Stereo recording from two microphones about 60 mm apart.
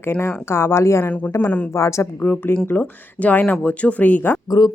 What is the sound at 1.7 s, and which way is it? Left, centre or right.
Speech, left.